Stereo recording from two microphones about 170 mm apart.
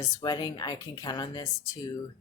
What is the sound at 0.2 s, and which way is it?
Speech, 25° left (ahead or behind).